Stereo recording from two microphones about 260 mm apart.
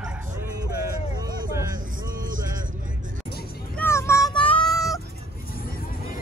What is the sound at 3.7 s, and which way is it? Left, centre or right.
Child singing, centre.